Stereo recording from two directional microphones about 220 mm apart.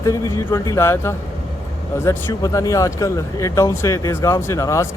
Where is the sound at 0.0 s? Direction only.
15° left (ahead or behind).